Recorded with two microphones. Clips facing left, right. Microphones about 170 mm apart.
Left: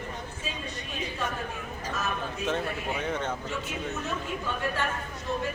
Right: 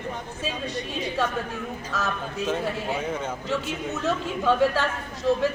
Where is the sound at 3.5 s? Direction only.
90° right.